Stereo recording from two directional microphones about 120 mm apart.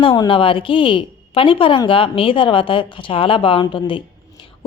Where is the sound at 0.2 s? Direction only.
45° left (ahead or behind).